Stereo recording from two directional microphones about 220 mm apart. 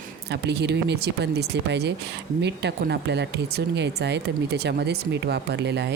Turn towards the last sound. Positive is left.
turn(degrees=-50)  # may be behind; listen again after turning